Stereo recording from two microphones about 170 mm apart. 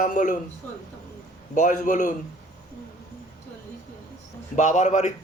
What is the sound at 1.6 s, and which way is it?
Speech, 45° left (ahead or behind).